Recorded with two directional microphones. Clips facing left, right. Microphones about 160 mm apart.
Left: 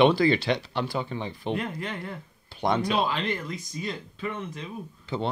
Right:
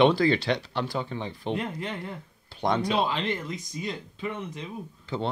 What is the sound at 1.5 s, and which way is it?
Speech, 25° right (ahead or behind).